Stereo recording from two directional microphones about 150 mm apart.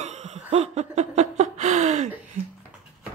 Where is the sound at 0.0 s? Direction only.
45° right (ahead or behind).